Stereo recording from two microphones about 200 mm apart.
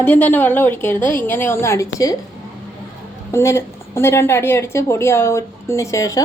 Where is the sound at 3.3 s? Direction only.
15° left (ahead or behind).